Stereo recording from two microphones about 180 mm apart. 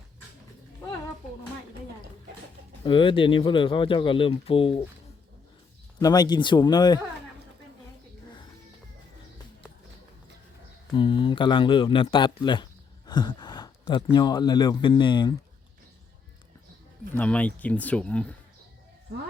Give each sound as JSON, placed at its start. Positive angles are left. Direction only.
{"t": 2.8, "sound": "speech", "side_deg": 30}
{"t": 6.0, "sound": "speech", "side_deg": 20}
{"t": 10.9, "sound": "speech", "side_deg": 30}
{"t": 17.2, "sound": "speech", "side_deg": 10}